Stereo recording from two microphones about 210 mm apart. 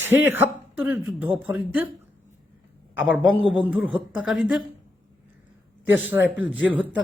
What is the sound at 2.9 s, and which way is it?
Speech, 5° right (ahead or behind).